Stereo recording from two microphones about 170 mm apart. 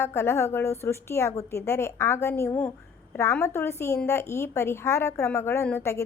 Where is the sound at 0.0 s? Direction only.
15° left (ahead or behind).